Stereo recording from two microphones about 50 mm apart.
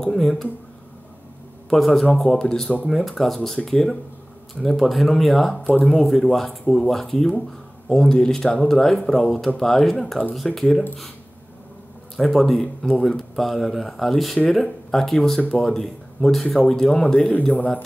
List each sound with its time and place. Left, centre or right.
0.0 s speech: centre
1.7 s speech: centre
2.3 s speech: centre
12.2 s speech: centre; by 17.6 s left